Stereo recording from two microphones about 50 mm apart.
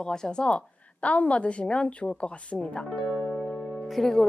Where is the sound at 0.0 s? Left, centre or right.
Centre.